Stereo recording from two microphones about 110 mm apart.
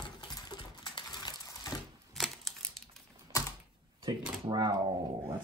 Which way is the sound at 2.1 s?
Centre (ahead or behind).